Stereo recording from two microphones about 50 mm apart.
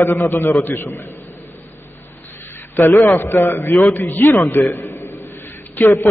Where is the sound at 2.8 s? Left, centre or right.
Left.